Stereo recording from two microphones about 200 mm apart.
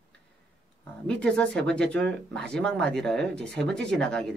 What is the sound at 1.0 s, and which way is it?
Speech, 5° left (ahead or behind).